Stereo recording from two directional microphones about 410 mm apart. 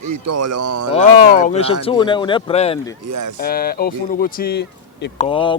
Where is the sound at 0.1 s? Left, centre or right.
Right.